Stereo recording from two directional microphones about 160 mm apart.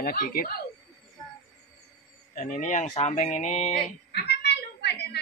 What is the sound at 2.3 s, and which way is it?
Speech, 55° left (ahead or behind).